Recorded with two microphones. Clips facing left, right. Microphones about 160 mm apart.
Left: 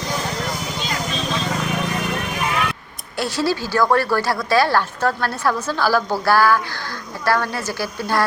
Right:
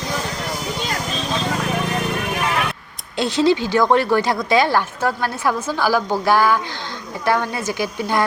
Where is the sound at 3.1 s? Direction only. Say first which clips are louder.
Right 5 dB; 20° right (ahead or behind).